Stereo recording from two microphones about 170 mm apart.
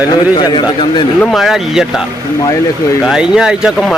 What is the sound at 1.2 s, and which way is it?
Speech, centre (ahead or behind).